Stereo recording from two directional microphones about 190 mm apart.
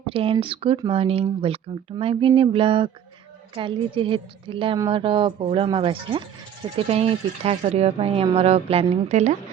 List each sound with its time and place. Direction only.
0.0 s speech: 30° right (ahead or behind)